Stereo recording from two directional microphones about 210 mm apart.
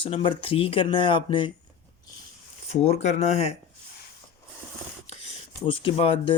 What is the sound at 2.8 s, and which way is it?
Speech, 30° left (ahead or behind).